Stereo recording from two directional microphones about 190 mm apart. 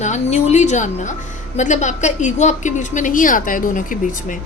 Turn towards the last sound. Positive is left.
turn(degrees=45)  # may be behind; listen again after turning